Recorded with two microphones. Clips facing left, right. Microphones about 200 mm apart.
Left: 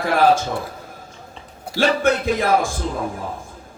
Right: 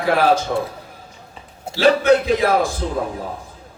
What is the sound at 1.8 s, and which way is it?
Speech, 50° left (ahead or behind).